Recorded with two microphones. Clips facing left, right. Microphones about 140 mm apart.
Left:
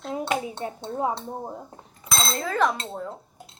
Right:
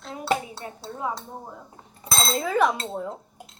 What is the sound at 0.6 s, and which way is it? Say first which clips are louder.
Speech: left 6 dB; 25° left (ahead or behind).